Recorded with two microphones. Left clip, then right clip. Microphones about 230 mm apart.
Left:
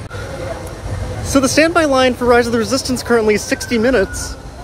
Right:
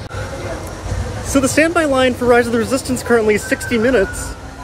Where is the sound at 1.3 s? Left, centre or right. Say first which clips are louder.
Left 1 dB; centre.